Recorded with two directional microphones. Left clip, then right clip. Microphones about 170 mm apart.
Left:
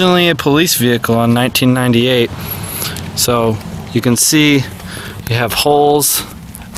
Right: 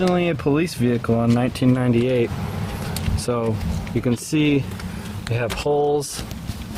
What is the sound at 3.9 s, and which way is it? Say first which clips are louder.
Speech: left 10 dB; 20° left (ahead or behind).